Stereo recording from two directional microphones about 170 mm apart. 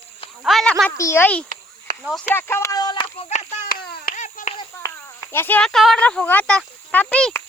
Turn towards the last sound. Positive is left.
turn(degrees=10)  # may be behind; listen again after turning